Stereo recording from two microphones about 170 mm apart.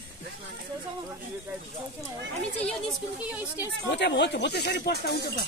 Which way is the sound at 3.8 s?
90° left.